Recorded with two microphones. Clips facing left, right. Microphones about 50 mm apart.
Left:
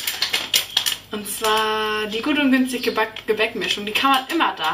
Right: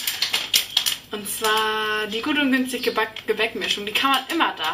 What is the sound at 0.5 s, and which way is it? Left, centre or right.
Typewriter, centre.